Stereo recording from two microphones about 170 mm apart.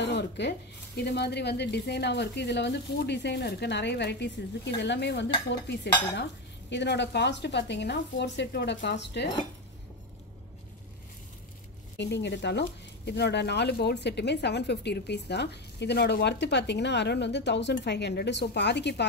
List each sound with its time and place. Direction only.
0.0 s speech: 90° left
12.0 s speech: 90° left